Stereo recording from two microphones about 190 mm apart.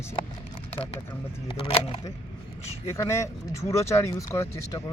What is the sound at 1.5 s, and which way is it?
Speech, 30° left (ahead or behind).